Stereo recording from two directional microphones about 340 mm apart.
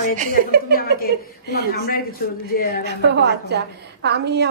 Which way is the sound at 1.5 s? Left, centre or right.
Left.